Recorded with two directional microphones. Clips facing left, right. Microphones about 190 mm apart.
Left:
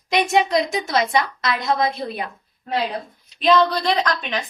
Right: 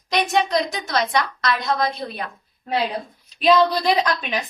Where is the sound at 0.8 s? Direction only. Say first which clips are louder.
Left 2 dB; 25° left (ahead or behind).